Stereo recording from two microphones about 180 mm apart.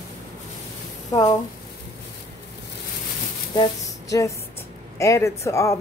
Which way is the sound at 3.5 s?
20° left (ahead or behind).